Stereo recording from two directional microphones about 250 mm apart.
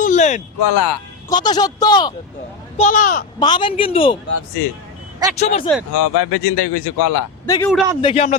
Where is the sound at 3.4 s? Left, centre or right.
Centre.